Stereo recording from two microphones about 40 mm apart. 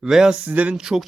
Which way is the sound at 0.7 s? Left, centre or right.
Centre.